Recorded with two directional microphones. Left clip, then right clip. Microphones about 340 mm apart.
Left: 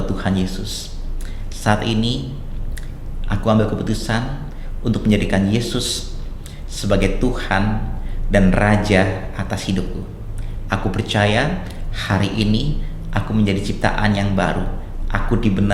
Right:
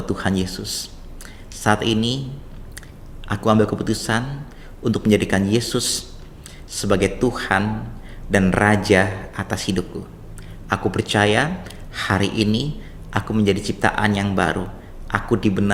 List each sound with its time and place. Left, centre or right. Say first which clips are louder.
0.0 s speech: even; right
3.2 s speech: right 1 dB; right